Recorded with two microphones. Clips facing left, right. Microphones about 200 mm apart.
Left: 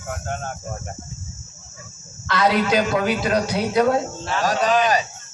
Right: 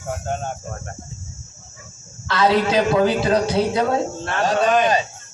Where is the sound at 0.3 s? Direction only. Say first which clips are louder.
Right 3 dB; 30° right (ahead or behind).